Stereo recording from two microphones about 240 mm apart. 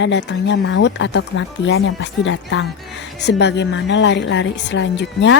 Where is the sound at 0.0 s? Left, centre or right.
Left.